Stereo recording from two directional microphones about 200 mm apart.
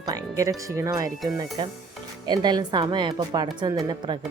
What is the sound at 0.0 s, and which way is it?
Music, 15° right (ahead or behind).